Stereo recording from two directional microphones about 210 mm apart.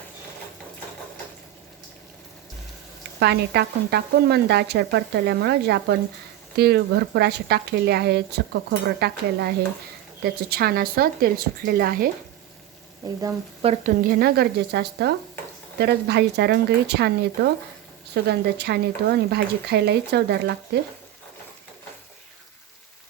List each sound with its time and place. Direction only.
3.2 s speech: 50° right (ahead or behind)
13.0 s speech: 20° right (ahead or behind)
14.1 s speech: 50° right (ahead or behind)